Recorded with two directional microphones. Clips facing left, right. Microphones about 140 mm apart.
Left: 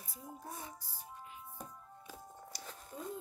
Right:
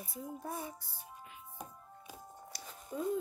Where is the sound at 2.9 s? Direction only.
75° right (ahead or behind).